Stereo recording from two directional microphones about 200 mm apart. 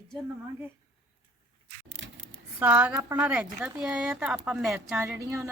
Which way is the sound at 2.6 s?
5° right (ahead or behind).